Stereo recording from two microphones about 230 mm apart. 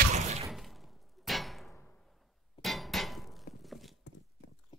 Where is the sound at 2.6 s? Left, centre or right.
Centre.